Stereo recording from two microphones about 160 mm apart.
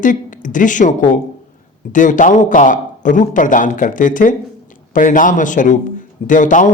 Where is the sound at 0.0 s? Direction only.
55° left (ahead or behind).